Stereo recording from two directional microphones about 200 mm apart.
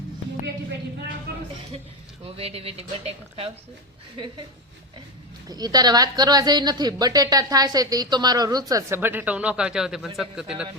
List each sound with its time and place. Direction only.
1.3 s a sound: 50° right (ahead or behind)
2.2 s a woman's voice: 30° right (ahead or behind)
5.5 s a woman's voice: 20° right (ahead or behind); by 10.7 s 5° right (ahead or behind)